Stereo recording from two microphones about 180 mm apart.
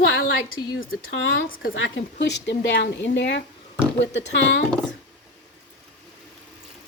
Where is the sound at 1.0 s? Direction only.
90° left.